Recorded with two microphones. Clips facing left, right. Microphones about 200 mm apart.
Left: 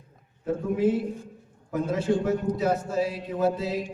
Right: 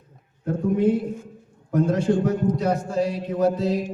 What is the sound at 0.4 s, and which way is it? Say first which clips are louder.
A man's voice: right 3 dB; 5° left (ahead or behind).